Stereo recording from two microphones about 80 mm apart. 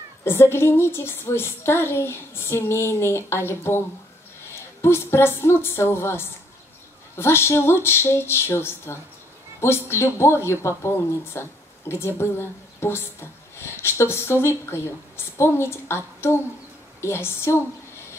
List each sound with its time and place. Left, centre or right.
0.2 s speech: left